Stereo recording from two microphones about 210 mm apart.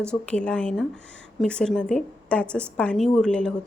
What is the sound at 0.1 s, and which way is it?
A woman's voice, 5° left (ahead or behind).